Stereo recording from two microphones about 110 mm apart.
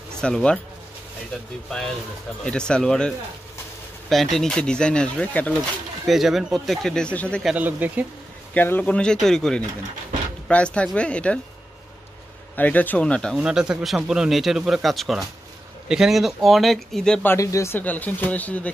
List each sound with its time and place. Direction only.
0.2 s speech: 10° left (ahead or behind)
2.4 s speech: 10° left (ahead or behind)
4.1 s speech: centre (ahead or behind)
6.0 s a man's voice: centre (ahead or behind)
7.5 s speech: 15° right (ahead or behind)
8.5 s speech: 15° left (ahead or behind)
12.5 s speech: 15° left (ahead or behind)
13.4 s a man's voice: 5° right (ahead or behind)
17.4 s speech: 30° left (ahead or behind)
17.7 s speech: 15° left (ahead or behind)